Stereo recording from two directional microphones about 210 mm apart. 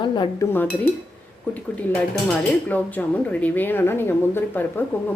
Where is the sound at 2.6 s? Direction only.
10° left (ahead or behind).